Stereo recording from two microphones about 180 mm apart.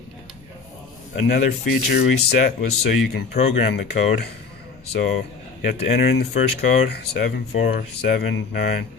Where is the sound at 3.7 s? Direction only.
65° left (ahead or behind).